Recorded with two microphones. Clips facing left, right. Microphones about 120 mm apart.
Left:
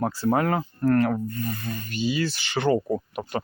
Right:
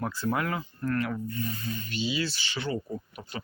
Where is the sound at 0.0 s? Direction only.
35° left (ahead or behind).